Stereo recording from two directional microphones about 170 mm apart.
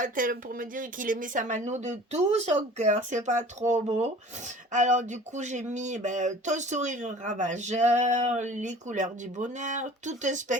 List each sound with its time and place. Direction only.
0.0 s speech: 55° right (ahead or behind)